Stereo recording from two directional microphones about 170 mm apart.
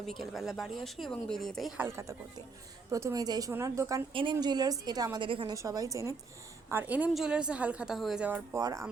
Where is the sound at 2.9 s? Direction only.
20° right (ahead or behind).